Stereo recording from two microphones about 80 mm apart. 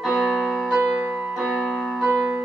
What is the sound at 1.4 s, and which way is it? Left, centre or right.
Piano, centre.